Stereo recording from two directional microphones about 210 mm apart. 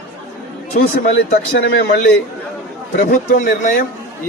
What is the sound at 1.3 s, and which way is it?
A man's voice, 50° left (ahead or behind).